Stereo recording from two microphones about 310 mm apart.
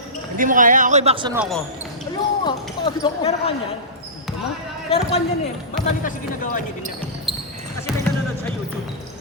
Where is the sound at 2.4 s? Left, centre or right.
Centre.